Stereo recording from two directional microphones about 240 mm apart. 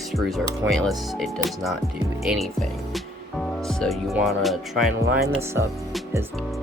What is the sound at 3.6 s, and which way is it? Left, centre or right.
Speech, centre.